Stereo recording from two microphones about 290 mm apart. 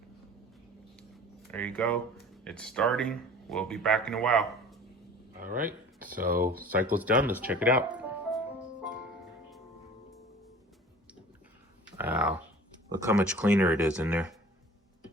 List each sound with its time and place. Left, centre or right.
0.9 s speech: centre
5.4 s speech: right
6.6 s speech: centre
11.9 s dog: centre
13.0 s speech: centre